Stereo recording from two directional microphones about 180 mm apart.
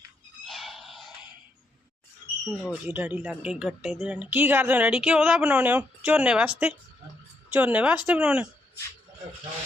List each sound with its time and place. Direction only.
0.4 s a sound: centre (ahead or behind)
2.4 s speech: centre (ahead or behind)
7.5 s speech: 10° right (ahead or behind)